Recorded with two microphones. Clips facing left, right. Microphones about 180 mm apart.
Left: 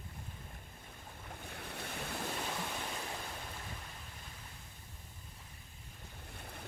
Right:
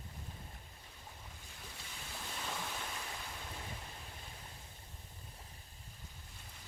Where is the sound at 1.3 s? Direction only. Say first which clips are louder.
Left 8 dB; 65° left (ahead or behind).